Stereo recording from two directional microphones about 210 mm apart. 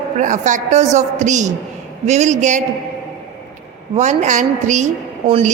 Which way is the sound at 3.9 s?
35° right (ahead or behind).